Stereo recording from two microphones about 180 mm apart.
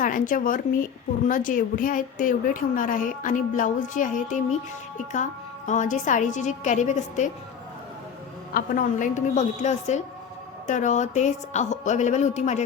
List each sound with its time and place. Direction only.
0.0 s a woman's voice: 50° left (ahead or behind)
8.5 s a woman's voice: 50° left (ahead or behind)